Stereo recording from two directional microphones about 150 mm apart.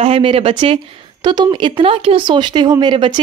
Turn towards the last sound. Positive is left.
turn(degrees=-35)  # may be behind; listen again after turning